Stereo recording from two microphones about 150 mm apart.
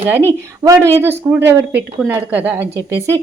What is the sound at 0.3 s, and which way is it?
A woman's voice, 20° right (ahead or behind).